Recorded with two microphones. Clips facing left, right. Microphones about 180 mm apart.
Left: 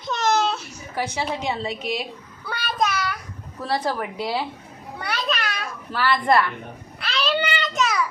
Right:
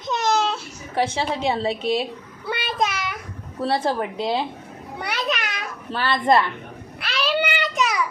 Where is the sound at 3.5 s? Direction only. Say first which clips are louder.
Right 3 dB; 25° right (ahead or behind).